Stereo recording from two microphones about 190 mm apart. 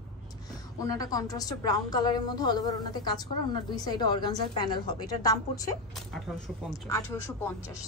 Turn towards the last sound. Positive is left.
turn(degrees=15)  # may be behind; listen again after turning